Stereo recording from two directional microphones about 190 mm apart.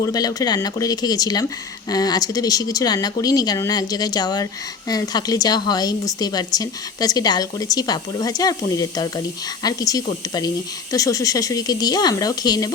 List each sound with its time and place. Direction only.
0.0 s a woman's voice: 20° left (ahead or behind)